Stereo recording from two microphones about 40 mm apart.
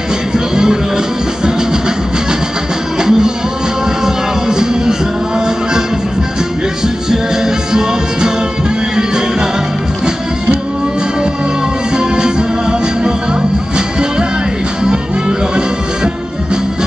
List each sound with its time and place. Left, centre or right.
0.3 s music: centre
3.0 s music: centre
7.1 s music: centre
12.0 s music: centre
14.9 s music: centre